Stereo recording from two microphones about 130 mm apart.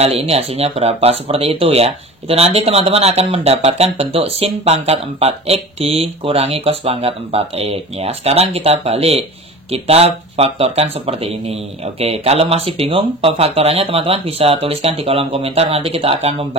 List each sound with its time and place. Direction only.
0.0 s speech: 50° right (ahead or behind)